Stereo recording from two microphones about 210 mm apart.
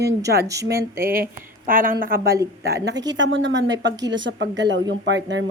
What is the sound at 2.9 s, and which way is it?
Speech, 20° right (ahead or behind).